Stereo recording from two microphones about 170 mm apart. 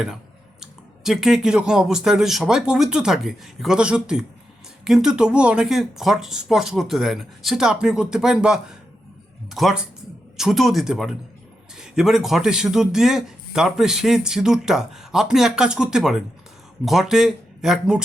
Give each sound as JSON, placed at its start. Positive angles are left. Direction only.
{"t": 0.6, "sound": "speech", "side_deg": 0}